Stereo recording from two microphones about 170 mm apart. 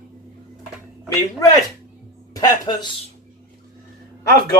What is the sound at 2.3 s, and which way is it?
Speech, 25° left (ahead or behind).